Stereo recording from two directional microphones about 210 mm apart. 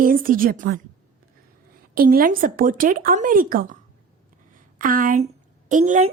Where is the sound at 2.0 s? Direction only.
45° right (ahead or behind).